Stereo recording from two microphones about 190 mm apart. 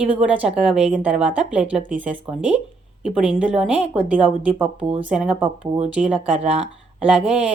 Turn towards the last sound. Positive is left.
turn(degrees=-5)  # may be behind; listen again after turning